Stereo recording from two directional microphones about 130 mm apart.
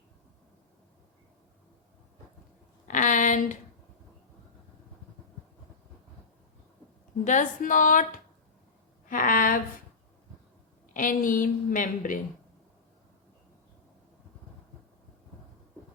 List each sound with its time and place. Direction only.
2.8 s a sound: 80° left
7.3 s a woman's voice: 80° left
10.9 s a woman's voice: 90° left